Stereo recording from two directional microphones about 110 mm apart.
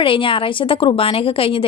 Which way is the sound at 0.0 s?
50° left (ahead or behind).